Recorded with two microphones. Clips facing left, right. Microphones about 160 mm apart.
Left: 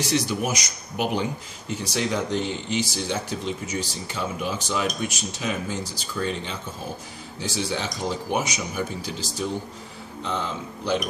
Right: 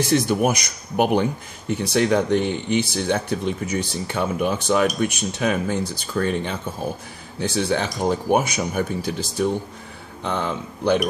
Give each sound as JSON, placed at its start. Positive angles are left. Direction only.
{"t": 0.0, "sound": "speech", "side_deg": -50}